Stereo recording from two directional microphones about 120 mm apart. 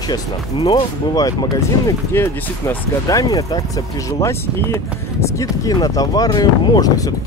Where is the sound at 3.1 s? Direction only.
30° left (ahead or behind).